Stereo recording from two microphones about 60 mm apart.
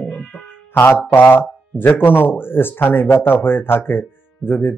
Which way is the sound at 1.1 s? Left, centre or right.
Left.